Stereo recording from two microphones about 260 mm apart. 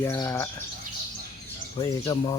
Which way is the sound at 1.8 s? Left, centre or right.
Centre.